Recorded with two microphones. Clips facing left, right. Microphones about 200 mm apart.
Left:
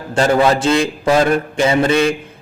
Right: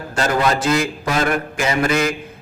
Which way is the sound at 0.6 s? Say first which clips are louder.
Left 4 dB; 30° left (ahead or behind).